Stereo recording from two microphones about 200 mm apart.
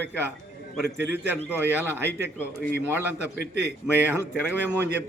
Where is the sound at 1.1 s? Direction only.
10° right (ahead or behind).